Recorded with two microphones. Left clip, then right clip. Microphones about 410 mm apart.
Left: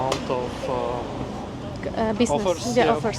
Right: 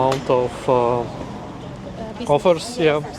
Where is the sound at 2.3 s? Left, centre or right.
Right.